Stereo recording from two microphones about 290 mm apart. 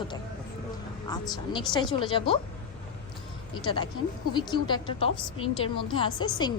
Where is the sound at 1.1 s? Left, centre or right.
Centre.